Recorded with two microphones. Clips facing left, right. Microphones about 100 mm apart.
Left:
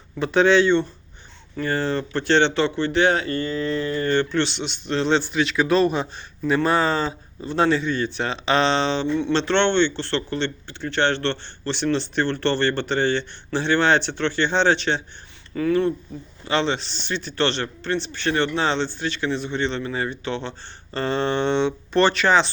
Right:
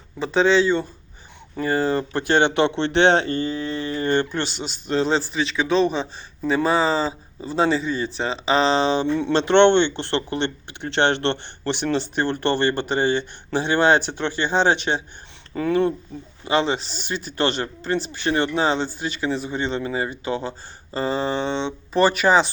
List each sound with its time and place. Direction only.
0.2 s speech: centre (ahead or behind)
9.0 s speech: 35° right (ahead or behind)
9.3 s speech: 15° right (ahead or behind)
16.5 s speech: 10° right (ahead or behind)